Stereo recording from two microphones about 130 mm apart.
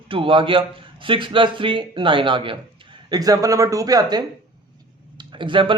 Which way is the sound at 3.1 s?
30° right (ahead or behind).